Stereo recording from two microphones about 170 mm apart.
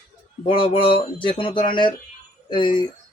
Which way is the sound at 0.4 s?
30° left (ahead or behind).